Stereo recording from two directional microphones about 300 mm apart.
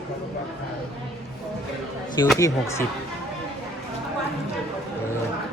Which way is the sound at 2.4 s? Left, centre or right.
Centre.